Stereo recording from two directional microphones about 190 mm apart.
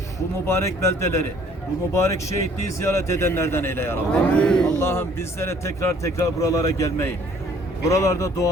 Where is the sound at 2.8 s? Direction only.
15° left (ahead or behind).